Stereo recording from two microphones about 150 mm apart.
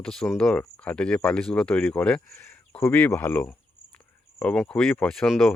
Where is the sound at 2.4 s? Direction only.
15° left (ahead or behind).